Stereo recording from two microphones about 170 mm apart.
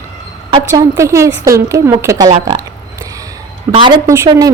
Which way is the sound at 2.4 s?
20° right (ahead or behind).